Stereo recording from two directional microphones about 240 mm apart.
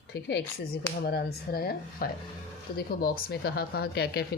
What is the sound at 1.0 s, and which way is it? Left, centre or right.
Speech, left.